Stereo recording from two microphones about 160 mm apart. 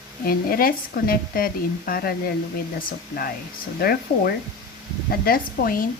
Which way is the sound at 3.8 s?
70° left (ahead or behind).